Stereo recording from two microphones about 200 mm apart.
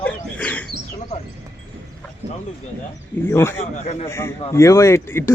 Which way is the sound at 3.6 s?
30° left (ahead or behind).